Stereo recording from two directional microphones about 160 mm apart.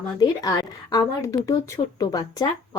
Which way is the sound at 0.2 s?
25° left (ahead or behind).